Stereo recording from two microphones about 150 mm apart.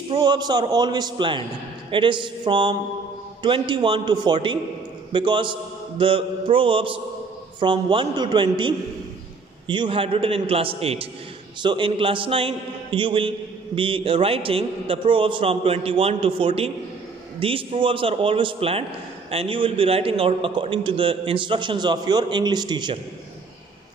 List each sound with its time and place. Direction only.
0.1 s a man's voice: 30° right (ahead or behind)